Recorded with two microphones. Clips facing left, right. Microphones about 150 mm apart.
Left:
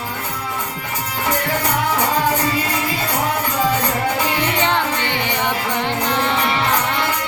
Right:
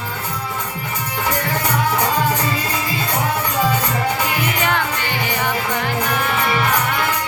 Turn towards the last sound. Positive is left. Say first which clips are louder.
# left 1 dB
turn(degrees=25)  # may be behind; listen again after turning